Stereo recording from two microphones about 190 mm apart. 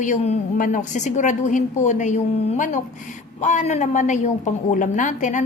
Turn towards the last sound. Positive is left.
turn(degrees=40)  # may be behind; listen again after turning